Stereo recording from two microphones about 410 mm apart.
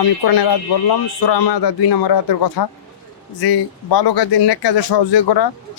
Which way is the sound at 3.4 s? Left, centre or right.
Left.